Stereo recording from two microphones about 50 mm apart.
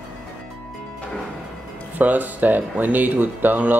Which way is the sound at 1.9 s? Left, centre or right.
Right.